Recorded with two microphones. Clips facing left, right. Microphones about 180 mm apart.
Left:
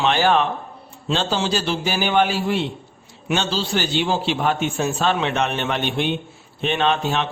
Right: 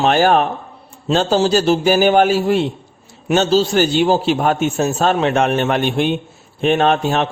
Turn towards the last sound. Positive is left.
turn(degrees=-45)  # may be behind; listen again after turning